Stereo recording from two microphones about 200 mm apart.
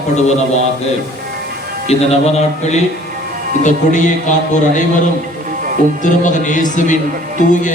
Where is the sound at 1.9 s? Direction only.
35° left (ahead or behind).